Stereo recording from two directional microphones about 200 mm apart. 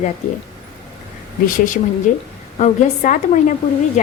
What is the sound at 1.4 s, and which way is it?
A woman's voice, 40° left (ahead or behind).